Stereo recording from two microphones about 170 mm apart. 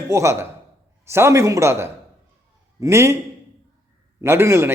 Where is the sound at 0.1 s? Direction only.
15° right (ahead or behind).